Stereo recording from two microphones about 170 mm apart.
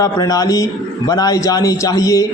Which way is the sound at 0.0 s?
20° left (ahead or behind).